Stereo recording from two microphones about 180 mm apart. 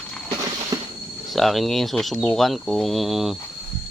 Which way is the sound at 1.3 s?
Centre (ahead or behind).